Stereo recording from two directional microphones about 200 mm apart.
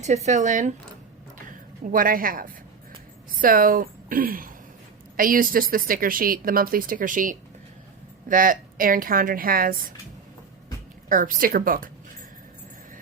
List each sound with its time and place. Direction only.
0.0 s a woman's voice: 35° right (ahead or behind)
11.1 s a woman's voice: 40° right (ahead or behind)